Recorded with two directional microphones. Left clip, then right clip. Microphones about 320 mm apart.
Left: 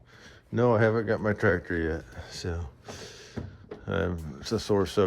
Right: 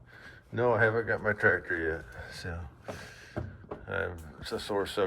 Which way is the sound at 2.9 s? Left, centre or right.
Centre.